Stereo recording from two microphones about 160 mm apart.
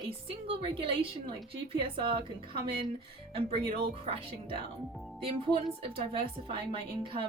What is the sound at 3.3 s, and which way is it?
Speech, 35° right (ahead or behind).